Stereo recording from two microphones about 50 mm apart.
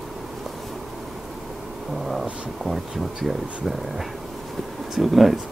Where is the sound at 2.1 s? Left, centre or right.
Centre.